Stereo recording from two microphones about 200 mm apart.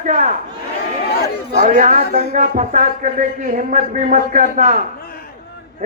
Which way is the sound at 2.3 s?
40° right (ahead or behind).